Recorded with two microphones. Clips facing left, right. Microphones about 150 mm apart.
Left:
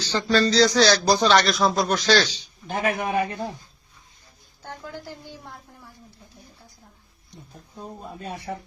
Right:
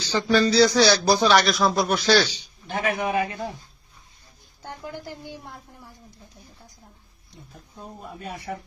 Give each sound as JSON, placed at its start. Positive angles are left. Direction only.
{"t": 0.0, "sound": "speech", "side_deg": -10}
{"t": 2.6, "sound": "a man's voice", "side_deg": 45}
{"t": 4.6, "sound": "speech", "side_deg": -15}